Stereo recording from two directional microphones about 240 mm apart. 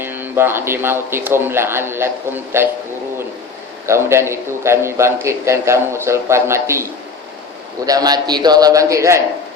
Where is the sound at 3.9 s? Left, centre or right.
Centre.